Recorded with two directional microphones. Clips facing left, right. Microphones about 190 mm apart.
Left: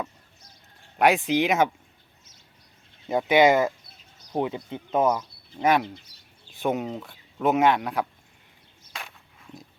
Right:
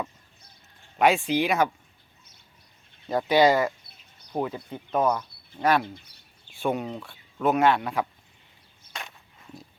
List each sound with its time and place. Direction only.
0.9 s speech: 15° left (ahead or behind)
3.1 s speech: 20° left (ahead or behind)
6.1 s bird: 60° right (ahead or behind)
6.6 s speech: 20° left (ahead or behind)
7.8 s speech: 5° left (ahead or behind)
8.9 s walk: centre (ahead or behind)